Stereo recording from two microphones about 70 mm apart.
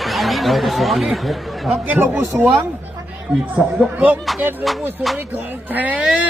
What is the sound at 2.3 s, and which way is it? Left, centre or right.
Speech, centre.